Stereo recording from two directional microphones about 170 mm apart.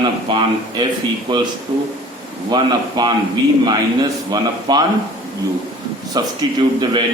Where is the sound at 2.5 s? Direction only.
25° right (ahead or behind).